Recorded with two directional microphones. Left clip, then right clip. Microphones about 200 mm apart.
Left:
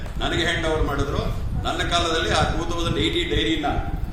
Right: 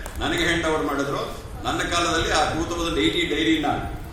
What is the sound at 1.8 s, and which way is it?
A man's voice, 35° left (ahead or behind).